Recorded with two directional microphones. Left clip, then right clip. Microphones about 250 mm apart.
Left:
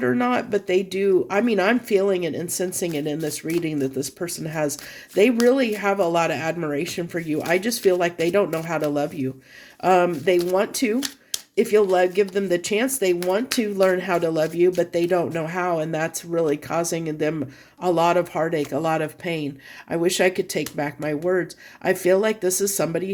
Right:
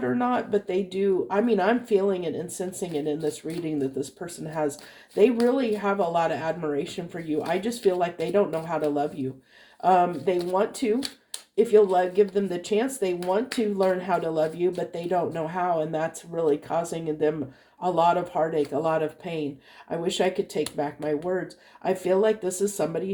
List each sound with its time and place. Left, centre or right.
0.0 s speech: left
5.1 s speech: left